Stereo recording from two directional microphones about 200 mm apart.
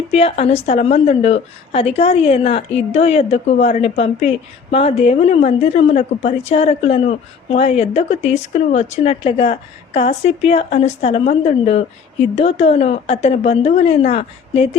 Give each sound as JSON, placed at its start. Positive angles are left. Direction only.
{"t": 0.1, "sound": "a woman's voice", "side_deg": 30}